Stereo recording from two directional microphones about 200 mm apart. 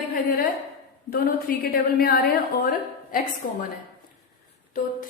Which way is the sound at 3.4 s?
45° left (ahead or behind).